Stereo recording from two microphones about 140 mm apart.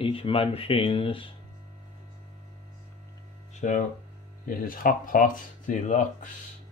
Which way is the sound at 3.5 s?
65° left (ahead or behind).